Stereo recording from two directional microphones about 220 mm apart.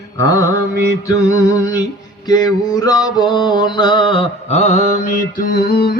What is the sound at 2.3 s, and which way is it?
Mantra, 15° left (ahead or behind).